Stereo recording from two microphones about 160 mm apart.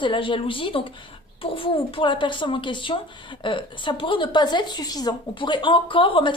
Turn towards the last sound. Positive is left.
turn(degrees=30)  # may be behind; listen again after turning